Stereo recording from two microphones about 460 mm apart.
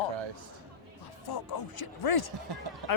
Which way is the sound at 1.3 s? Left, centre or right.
Left.